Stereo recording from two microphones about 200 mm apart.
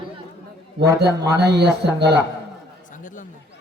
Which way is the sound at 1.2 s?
55° right (ahead or behind).